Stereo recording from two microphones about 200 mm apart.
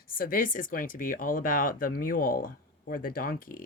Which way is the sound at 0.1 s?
45° left (ahead or behind).